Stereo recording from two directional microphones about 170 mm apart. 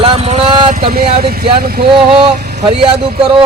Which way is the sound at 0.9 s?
65° right (ahead or behind).